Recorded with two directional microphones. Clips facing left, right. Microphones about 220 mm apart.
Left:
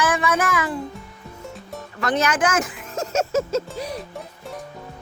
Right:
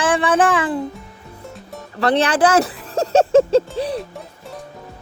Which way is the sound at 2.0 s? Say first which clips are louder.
Right 5 dB; 35° right (ahead or behind).